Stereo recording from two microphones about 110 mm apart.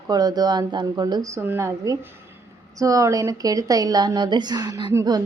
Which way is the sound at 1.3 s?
20° right (ahead or behind).